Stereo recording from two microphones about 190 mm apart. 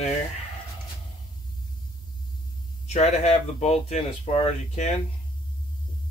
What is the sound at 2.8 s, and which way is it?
Speech, 35° left (ahead or behind).